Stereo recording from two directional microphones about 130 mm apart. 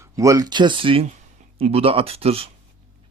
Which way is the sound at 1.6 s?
50° right (ahead or behind).